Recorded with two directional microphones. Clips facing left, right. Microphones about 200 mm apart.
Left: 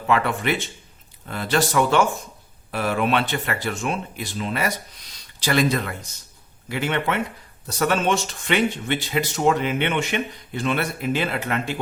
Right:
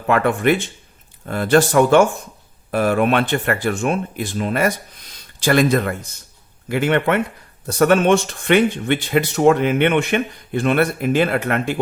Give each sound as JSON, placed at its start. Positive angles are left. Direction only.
{"t": 0.1, "sound": "speech", "side_deg": -50}